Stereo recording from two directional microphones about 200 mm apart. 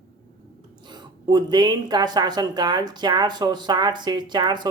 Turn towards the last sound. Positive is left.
turn(degrees=-20)  # may be behind; listen again after turning